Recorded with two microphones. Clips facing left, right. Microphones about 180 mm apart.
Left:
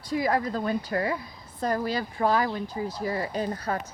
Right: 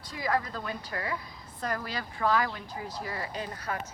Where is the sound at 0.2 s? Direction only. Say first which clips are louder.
Left 3 dB; 25° left (ahead or behind).